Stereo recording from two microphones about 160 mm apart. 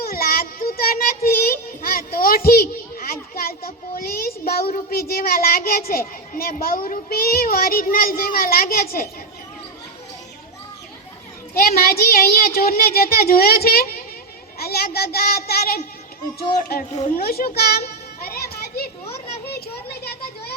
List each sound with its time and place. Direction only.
0.0 s child singing: 65° left (ahead or behind)
3.9 s a child's voice: 70° left (ahead or behind)
11.5 s a child's voice: 65° left (ahead or behind)
18.3 s children playing: 70° left (ahead or behind)
20.1 s children playing: 80° left